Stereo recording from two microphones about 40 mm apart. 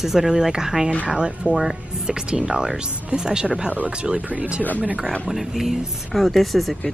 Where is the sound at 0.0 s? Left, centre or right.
Centre.